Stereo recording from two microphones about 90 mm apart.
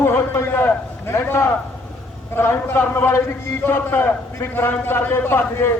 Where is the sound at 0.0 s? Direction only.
25° left (ahead or behind).